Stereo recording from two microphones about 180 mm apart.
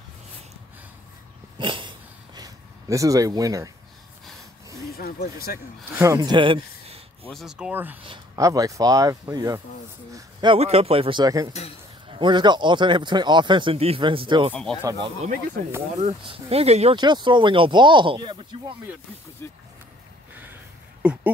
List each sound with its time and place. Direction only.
1.6 s a sound: 25° right (ahead or behind)
4.9 s speech: 60° left (ahead or behind)
5.9 s speech: 20° right (ahead or behind)
7.2 s speech: centre (ahead or behind); by 14.5 s 30° right (ahead or behind)
14.5 s speech: 5° left (ahead or behind)
14.8 s speech: 25° right (ahead or behind)
16.3 s speech: 35° right (ahead or behind)
19.4 s speech: 10° left (ahead or behind)
21.0 s a sound: 5° right (ahead or behind)